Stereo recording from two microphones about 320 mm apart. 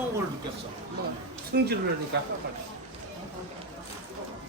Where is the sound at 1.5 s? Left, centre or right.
Right.